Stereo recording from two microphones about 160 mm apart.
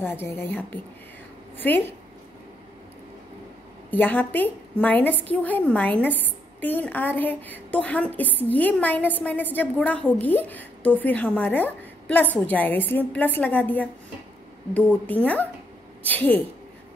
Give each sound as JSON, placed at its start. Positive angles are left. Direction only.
{"t": 0.0, "sound": "a woman's voice", "side_deg": 15}
{"t": 3.9, "sound": "a woman's voice", "side_deg": 10}